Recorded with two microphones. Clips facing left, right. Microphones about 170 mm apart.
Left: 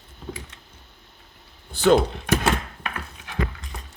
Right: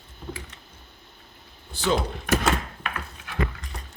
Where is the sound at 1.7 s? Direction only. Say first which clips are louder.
Left 8 dB; 55° left (ahead or behind).